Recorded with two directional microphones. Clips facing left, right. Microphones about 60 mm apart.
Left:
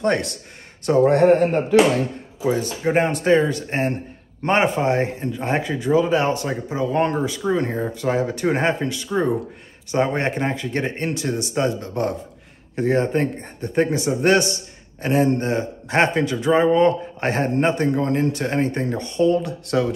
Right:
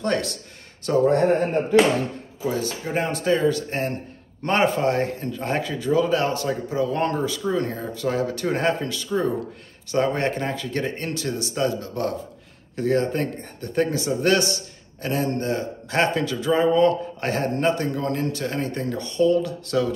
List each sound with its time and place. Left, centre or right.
0.0 s speech: left
1.0 s speech: left
2.4 s speech: left